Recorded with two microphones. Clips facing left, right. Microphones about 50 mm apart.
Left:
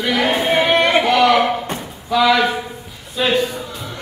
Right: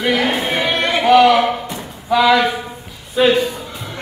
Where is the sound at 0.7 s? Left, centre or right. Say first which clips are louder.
Left 4 dB; left.